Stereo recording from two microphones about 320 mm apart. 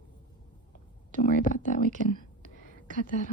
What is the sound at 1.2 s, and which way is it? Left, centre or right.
Speech, left.